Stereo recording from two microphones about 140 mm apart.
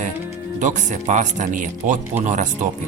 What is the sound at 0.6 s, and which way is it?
Speech, 60° right (ahead or behind).